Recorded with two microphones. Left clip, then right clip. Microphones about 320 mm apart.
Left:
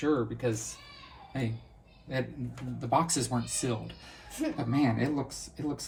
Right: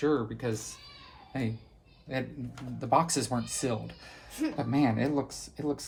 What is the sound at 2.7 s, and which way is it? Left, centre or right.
Speech, centre.